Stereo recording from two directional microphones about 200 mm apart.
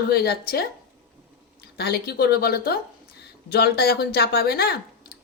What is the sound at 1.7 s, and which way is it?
Speech, 55° left (ahead or behind).